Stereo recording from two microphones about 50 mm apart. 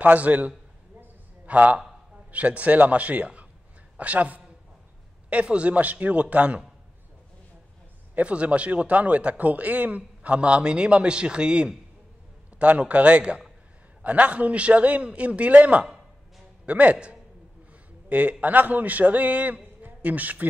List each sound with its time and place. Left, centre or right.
0.0 s a man's voice: right
8.2 s a man's voice: right